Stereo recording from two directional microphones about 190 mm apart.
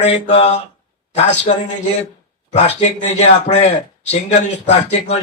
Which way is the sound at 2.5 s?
40° left (ahead or behind).